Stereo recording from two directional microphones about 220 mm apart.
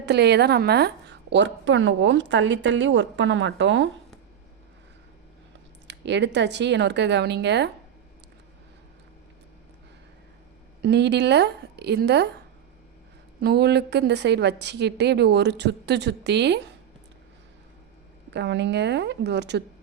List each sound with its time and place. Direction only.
0.0 s a woman's voice: 50° right (ahead or behind)
5.9 s a woman's voice: 50° right (ahead or behind)
10.8 s a woman's voice: 50° right (ahead or behind)
13.4 s a woman's voice: 50° right (ahead or behind)
18.3 s a woman's voice: 50° right (ahead or behind)